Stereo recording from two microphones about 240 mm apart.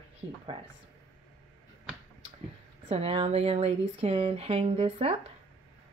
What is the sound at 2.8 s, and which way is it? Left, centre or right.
Speech, right.